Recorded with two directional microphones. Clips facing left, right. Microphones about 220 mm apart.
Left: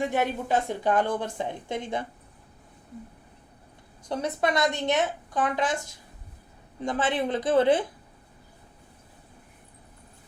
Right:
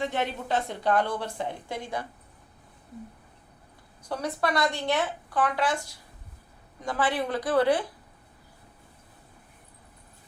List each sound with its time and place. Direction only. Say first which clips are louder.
0.0 s a woman's voice: left 3 dB; 15° left (ahead or behind)
4.1 s a woman's voice: left 2 dB; 20° left (ahead or behind)
6.8 s a woman's voice: left 1 dB; 20° left (ahead or behind)